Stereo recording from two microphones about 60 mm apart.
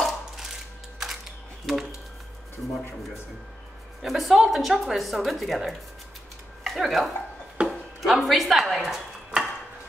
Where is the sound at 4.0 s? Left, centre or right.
Centre.